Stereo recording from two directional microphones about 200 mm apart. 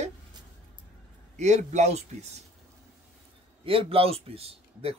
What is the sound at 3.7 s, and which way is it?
A man's voice, 30° right (ahead or behind).